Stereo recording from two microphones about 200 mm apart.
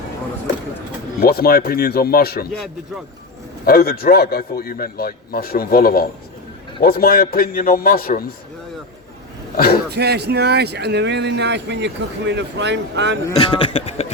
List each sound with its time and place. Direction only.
1.2 s a man's voice: 50° left (ahead or behind)
3.7 s a man's voice: 50° left (ahead or behind)
9.6 s a man's voice: 50° left (ahead or behind)
9.9 s speech: 55° right (ahead or behind)
13.3 s speech: 25° left (ahead or behind)